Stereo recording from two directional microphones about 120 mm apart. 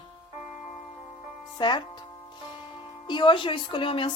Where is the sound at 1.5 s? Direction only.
40° left (ahead or behind).